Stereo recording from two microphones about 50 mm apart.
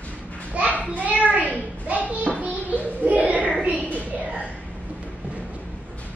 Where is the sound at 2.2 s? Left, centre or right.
Right.